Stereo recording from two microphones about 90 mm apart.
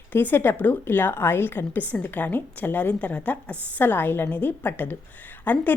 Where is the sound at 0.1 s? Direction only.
20° left (ahead or behind).